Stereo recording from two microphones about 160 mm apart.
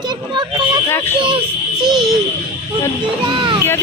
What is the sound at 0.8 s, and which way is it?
Speech, 15° left (ahead or behind).